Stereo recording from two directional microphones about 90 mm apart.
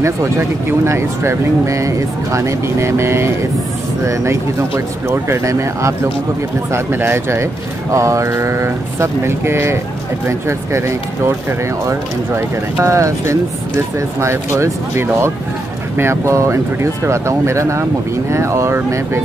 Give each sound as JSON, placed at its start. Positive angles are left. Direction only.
{"t": 0.0, "sound": "speech", "side_deg": -30}
{"t": 12.8, "sound": "speech", "side_deg": -35}